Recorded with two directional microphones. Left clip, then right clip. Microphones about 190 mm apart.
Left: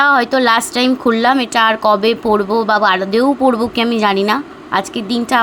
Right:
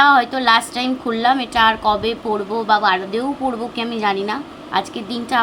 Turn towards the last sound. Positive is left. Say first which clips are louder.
# left 5 dB
turn(degrees=40)  # may be behind; listen again after turning